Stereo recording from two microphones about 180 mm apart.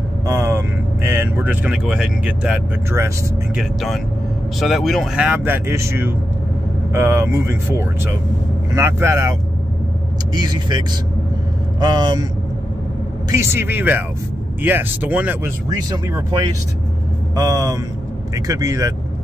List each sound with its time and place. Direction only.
0.3 s speech: 15° right (ahead or behind)
3.5 s speech: centre (ahead or behind)
10.3 s speech: 25° right (ahead or behind)
13.3 s speech: 15° right (ahead or behind)
15.7 s speech: 20° right (ahead or behind)